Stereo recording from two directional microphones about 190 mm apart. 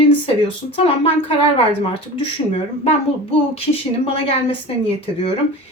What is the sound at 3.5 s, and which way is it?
Speech, 30° left (ahead or behind).